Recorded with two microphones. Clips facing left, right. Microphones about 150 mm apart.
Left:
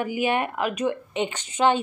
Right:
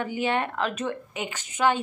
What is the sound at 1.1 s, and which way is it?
Speech, 30° left (ahead or behind).